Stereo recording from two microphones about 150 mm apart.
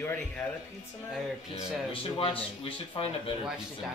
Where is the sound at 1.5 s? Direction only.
40° left (ahead or behind).